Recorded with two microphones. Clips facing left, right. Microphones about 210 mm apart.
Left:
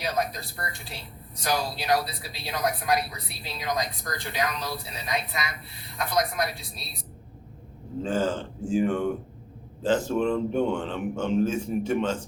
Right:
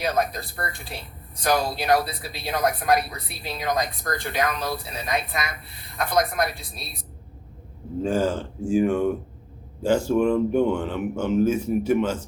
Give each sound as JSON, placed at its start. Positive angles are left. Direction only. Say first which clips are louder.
{"t": 0.0, "sound": "speech", "louder": "right 4 dB", "side_deg": -55}
{"t": 8.0, "sound": "speech", "louder": "right 3 dB", "side_deg": -10}